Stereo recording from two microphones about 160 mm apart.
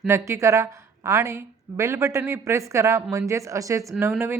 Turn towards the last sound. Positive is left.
turn(degrees=-15)  # may be behind; listen again after turning